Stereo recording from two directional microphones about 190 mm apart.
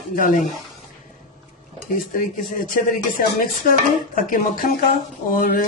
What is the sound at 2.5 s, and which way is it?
Speech, 45° left (ahead or behind).